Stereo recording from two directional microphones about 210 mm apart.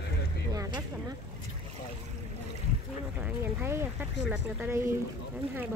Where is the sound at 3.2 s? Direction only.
10° right (ahead or behind).